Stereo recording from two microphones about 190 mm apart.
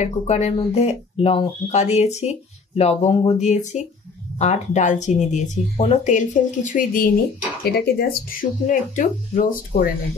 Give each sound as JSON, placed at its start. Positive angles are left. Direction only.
{"t": 0.0, "sound": "speech", "side_deg": 35}